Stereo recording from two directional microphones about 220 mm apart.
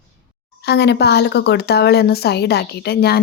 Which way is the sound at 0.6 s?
50° left (ahead or behind).